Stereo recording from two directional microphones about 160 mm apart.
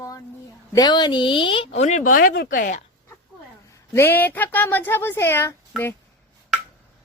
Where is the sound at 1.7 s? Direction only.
50° left (ahead or behind).